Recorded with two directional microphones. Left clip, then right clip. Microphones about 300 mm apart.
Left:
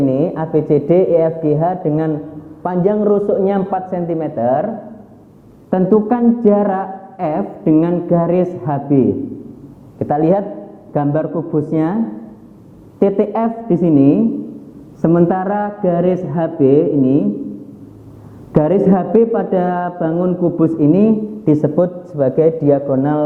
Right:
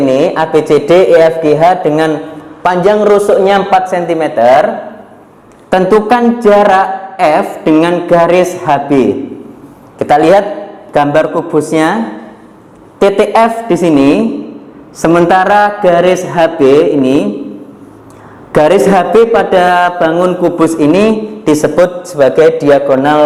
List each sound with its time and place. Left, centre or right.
0.0 s a woman's voice: centre
6.0 s a woman's voice: centre
18.5 s a woman's voice: centre